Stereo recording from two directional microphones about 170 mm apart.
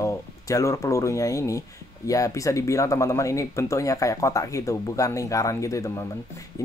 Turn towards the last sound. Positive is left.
turn(degrees=20)  # may be behind; listen again after turning